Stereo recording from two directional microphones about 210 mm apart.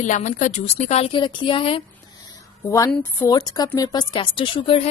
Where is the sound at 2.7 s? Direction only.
15° left (ahead or behind).